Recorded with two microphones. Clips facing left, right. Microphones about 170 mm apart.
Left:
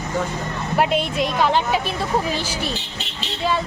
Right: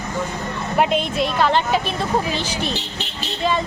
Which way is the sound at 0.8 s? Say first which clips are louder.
Right 1 dB; 10° left (ahead or behind).